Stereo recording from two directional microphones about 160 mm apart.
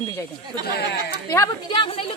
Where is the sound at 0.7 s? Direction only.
90° left.